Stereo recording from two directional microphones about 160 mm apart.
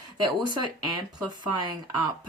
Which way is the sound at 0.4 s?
25° right (ahead or behind).